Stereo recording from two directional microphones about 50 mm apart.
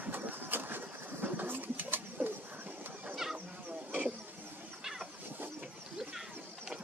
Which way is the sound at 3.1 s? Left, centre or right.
Centre.